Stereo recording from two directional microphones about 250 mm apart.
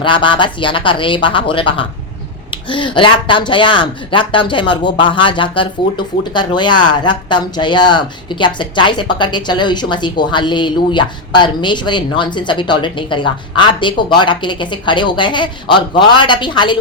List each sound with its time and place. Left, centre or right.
0.0 s speech: centre